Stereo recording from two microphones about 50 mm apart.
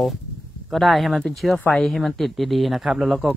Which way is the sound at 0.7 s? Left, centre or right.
Centre.